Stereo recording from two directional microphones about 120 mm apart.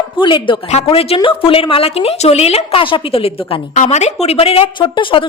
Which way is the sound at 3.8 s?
70° left (ahead or behind).